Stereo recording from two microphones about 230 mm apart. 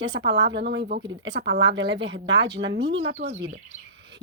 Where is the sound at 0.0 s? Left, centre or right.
Right.